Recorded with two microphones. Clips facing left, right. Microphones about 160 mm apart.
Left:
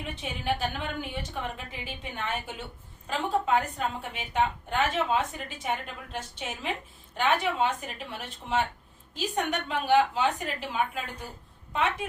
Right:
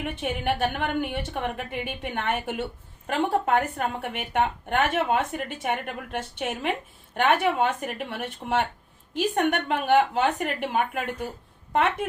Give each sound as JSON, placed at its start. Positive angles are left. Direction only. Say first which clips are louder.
{"t": 0.0, "sound": "speech", "louder": "right 6 dB", "side_deg": -60}